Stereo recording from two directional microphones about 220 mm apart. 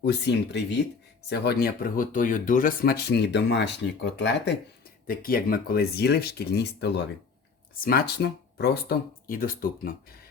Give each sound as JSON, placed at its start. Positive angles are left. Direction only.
{"t": 0.0, "sound": "speech", "side_deg": 50}
{"t": 5.0, "sound": "speech", "side_deg": 40}